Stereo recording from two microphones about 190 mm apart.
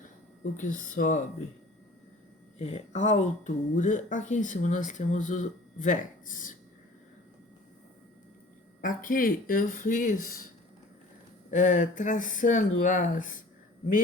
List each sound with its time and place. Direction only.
0.5 s speech: 45° left (ahead or behind)
2.6 s speech: 35° left (ahead or behind)
8.8 s speech: 45° left (ahead or behind)
11.5 s speech: 40° left (ahead or behind)